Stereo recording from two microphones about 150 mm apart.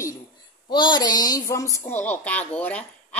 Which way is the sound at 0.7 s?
30° left (ahead or behind).